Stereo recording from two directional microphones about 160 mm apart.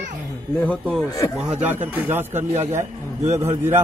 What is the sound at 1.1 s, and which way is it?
Speech, 20° left (ahead or behind).